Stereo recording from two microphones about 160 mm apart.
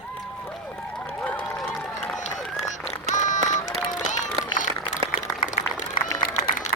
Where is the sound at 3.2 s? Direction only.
50° left (ahead or behind).